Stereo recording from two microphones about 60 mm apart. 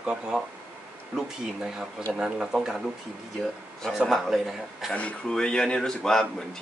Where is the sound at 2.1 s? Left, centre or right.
Centre.